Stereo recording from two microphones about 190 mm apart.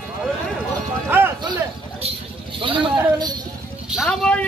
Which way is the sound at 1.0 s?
10° right (ahead or behind).